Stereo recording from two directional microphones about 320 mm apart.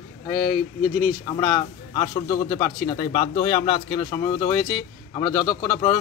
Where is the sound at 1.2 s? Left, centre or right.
Centre.